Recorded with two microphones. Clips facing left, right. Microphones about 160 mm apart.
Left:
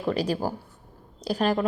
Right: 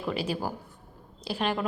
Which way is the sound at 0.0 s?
40° left (ahead or behind).